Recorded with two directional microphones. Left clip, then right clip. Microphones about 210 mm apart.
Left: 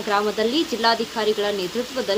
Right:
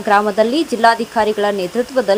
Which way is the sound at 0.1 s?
40° right (ahead or behind).